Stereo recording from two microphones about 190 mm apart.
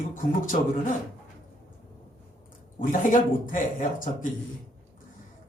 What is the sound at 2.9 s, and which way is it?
Speech, 45° left (ahead or behind).